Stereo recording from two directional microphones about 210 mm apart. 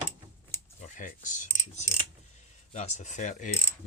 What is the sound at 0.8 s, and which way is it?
Speech, 35° left (ahead or behind).